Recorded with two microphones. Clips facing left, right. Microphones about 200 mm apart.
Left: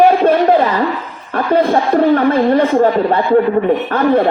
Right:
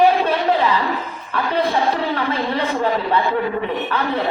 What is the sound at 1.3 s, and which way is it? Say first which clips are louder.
A woman's voice: left 7 dB; 50° left (ahead or behind).